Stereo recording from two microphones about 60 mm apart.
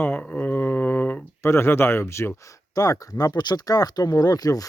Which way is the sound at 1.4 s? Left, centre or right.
Left.